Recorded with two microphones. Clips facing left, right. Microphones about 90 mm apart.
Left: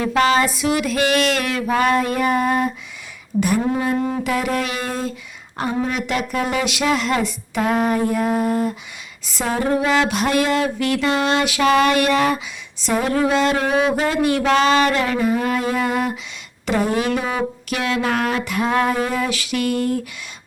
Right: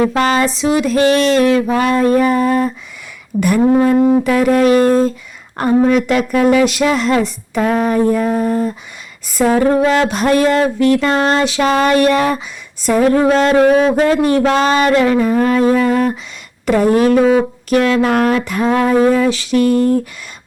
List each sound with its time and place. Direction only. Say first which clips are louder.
0.0 s speech: right 3 dB; 40° right (ahead or behind)
0.5 s speech: right 6 dB; 30° right (ahead or behind)
3.7 s speech: right 9 dB; 50° right (ahead or behind)
3.9 s wind instrument: right 10 dB; 30° right (ahead or behind)
4.3 s speech: right 10 dB; 45° right (ahead or behind)
9.3 s speech: right 9 dB; 50° right (ahead or behind)
9.6 s speech: right 5 dB; 40° right (ahead or behind)
12.8 s speech: right 7 dB; 50° right (ahead or behind); by 20.0 s 35° right (ahead or behind)